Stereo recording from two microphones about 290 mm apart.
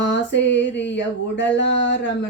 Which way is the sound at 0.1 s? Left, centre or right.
Left.